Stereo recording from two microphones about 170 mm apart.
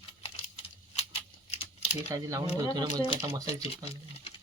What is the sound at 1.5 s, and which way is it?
Typing, 35° left (ahead or behind).